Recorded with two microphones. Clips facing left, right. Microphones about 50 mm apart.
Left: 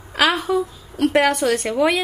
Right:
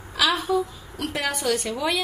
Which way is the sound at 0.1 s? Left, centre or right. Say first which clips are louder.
Left 4 dB; left.